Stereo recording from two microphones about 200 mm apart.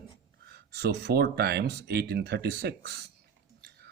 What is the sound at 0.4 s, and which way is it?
Speech, 55° right (ahead or behind).